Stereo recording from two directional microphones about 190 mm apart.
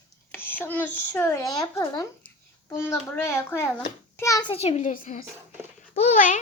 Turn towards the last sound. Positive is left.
turn(degrees=40)  # may be behind; listen again after turning